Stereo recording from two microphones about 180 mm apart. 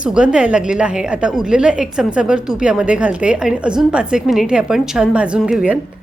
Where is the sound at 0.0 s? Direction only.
5° right (ahead or behind).